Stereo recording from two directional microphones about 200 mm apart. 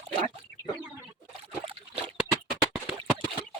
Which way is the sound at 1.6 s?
25° right (ahead or behind).